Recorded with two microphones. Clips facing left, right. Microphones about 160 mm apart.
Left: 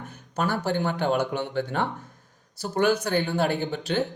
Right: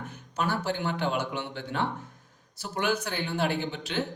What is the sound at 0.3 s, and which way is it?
Speech, 45° left (ahead or behind).